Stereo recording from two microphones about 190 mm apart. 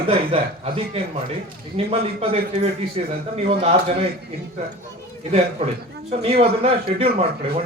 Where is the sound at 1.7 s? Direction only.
30° right (ahead or behind).